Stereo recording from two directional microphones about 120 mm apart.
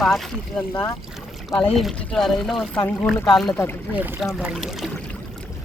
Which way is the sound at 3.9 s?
15° right (ahead or behind).